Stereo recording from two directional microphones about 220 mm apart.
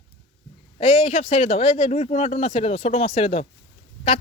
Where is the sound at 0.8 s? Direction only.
30° left (ahead or behind).